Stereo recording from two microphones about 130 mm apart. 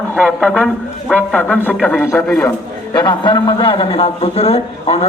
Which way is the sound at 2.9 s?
35° left (ahead or behind).